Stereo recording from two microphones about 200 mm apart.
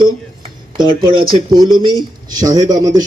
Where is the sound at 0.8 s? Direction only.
20° right (ahead or behind).